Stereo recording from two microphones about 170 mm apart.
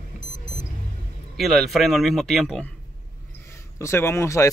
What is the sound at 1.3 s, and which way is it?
A man's voice, centre (ahead or behind).